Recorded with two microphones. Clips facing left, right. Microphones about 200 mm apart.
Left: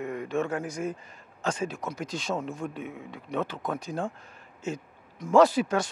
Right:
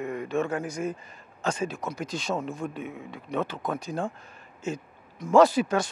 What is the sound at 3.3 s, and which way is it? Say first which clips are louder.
Speech: right 1 dB; 25° right (ahead or behind).